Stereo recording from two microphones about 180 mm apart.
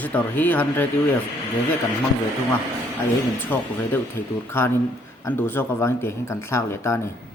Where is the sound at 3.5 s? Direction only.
10° left (ahead or behind).